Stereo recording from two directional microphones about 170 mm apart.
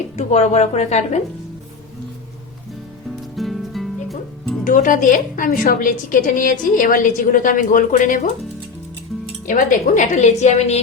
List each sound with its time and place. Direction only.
0.2 s a woman's voice: 40° left (ahead or behind)
3.3 s music: centre (ahead or behind)
4.6 s a woman's voice: 50° left (ahead or behind)
9.5 s a woman's voice: 50° left (ahead or behind)